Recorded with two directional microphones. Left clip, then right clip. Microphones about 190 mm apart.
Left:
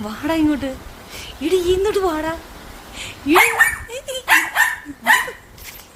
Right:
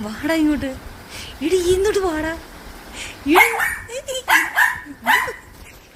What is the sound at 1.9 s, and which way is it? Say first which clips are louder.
Speech: left 1 dB; 20° left (ahead or behind).